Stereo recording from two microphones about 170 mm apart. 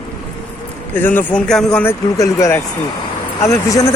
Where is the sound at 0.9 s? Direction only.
10° left (ahead or behind).